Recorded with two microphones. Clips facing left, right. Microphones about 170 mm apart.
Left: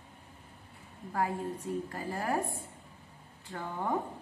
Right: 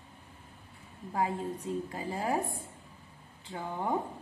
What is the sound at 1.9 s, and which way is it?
Speech, 15° right (ahead or behind).